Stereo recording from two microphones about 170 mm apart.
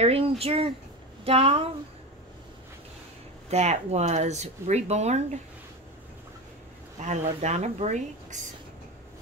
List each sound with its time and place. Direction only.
0.0 s speech: 35° right (ahead or behind)
3.4 s speech: 40° right (ahead or behind)
7.0 s speech: 45° right (ahead or behind)